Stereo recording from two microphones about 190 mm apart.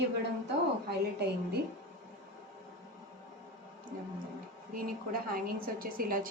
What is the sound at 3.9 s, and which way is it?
A woman's voice, 50° right (ahead or behind).